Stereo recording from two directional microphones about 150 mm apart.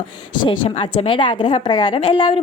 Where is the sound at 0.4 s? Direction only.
35° left (ahead or behind).